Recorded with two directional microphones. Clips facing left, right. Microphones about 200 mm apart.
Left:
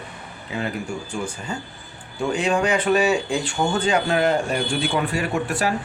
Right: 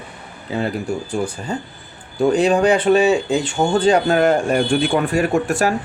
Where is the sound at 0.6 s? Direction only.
35° right (ahead or behind).